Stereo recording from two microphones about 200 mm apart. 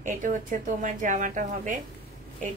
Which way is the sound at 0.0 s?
40° right (ahead or behind).